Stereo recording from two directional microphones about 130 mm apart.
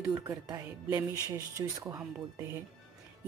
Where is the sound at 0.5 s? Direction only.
25° right (ahead or behind).